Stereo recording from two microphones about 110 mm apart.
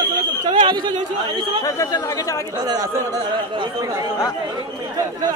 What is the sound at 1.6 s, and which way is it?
Speech, 30° left (ahead or behind).